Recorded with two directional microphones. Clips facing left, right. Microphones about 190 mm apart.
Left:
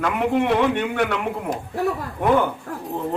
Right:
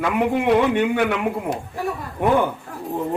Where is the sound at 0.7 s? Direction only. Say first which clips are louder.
Right 3 dB; 10° right (ahead or behind).